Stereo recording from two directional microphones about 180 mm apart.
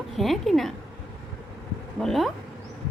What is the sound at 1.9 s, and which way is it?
Speech, centre (ahead or behind).